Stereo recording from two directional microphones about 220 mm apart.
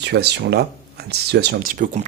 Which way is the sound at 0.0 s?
50° right (ahead or behind).